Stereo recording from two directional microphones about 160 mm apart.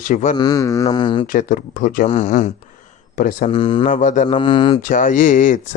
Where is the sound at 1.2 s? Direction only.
60° left (ahead or behind).